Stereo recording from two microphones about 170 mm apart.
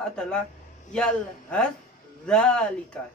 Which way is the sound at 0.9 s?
5° left (ahead or behind).